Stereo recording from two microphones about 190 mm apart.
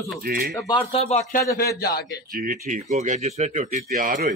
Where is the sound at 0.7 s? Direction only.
30° left (ahead or behind).